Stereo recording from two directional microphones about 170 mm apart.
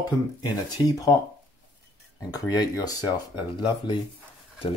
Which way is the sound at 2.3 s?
20° left (ahead or behind).